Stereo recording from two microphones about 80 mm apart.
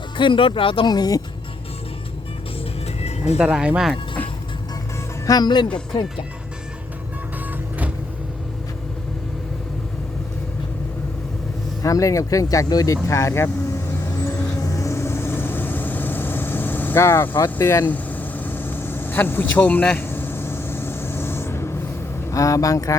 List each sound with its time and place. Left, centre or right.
0.2 s speech: left
3.3 s speech: centre
5.2 s speech: left
5.9 s speech: left
11.8 s speech: left
14.6 s vehicle: left
17.9 s vehicle: left
22.3 s speech: left